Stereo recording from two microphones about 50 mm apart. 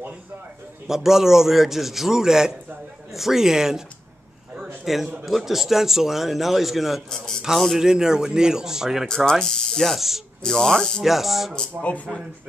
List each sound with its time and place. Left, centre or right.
0.8 s a man's voice: centre
4.8 s a man's voice: centre
7.1 s speech: centre
7.8 s a man's voice: centre
9.0 s speech: centre
9.8 s a man's voice: centre
10.4 s speech: centre
11.1 s a man's voice: centre
11.8 s speech: left